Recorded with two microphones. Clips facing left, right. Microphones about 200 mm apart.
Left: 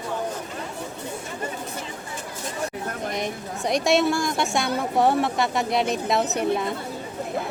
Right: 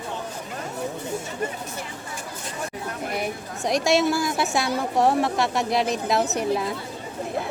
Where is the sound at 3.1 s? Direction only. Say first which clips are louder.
Right 2 dB; 10° right (ahead or behind).